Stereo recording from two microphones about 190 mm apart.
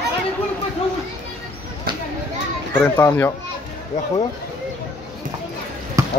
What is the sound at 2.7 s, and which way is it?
Speech, 10° left (ahead or behind).